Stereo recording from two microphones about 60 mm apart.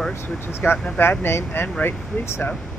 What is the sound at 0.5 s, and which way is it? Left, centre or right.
Speech, left.